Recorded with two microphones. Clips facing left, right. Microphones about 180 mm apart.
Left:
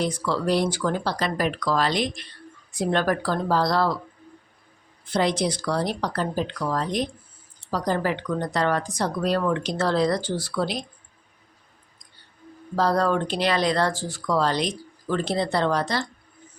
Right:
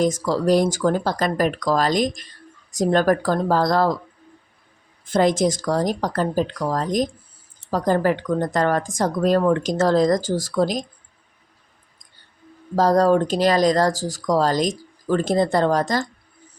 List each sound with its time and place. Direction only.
0.0 s speech: 40° right (ahead or behind)
5.0 s speech: 45° right (ahead or behind)
12.7 s speech: 40° right (ahead or behind)